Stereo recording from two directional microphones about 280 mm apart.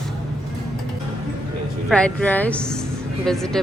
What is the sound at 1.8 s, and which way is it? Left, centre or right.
Speech, centre.